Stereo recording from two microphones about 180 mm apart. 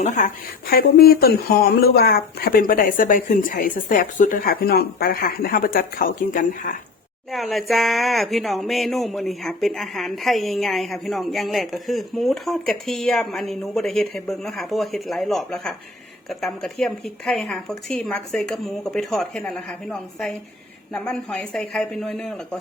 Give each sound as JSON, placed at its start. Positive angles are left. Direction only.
{"t": 0.0, "sound": "a woman's voice", "side_deg": 40}
{"t": 0.7, "sound": "speech", "side_deg": 60}
{"t": 7.3, "sound": "speech", "side_deg": 0}